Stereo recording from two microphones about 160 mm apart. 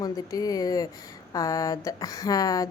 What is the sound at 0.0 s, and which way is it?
A woman's voice, 25° left (ahead or behind).